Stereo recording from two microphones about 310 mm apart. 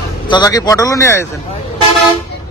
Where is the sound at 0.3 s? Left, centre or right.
Centre.